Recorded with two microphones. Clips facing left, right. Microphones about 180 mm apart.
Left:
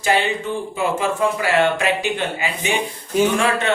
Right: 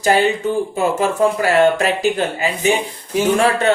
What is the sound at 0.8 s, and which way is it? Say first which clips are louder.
Speech: right 3 dB; 40° right (ahead or behind).